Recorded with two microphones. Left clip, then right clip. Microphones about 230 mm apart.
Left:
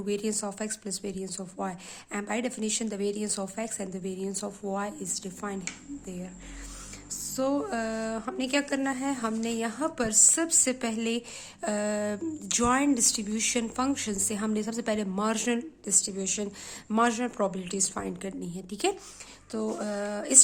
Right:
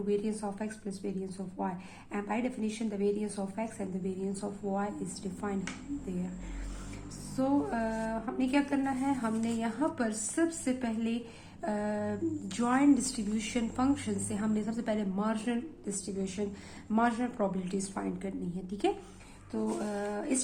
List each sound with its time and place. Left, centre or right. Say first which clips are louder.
0.0 s speech: left 2 dB; left
7.3 s speech: left 2 dB; left